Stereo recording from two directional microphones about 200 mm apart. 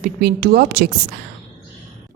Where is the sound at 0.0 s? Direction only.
50° right (ahead or behind).